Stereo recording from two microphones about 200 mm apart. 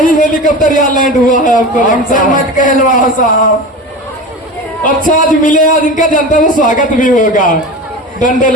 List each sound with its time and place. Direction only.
0.0 s a man's voice: 45° left (ahead or behind)
5.1 s a man's voice: 40° left (ahead or behind)